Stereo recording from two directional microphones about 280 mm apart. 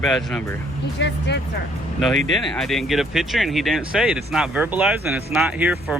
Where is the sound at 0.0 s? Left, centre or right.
Centre.